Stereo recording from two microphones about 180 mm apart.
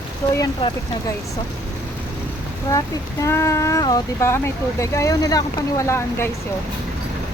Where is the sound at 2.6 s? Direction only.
20° left (ahead or behind).